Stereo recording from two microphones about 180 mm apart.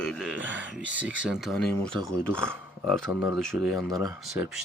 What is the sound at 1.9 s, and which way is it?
Speech, 20° right (ahead or behind).